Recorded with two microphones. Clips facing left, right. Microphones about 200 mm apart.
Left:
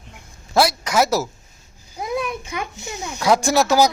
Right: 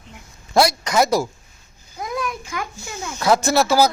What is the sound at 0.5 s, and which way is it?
Speech, 5° left (ahead or behind).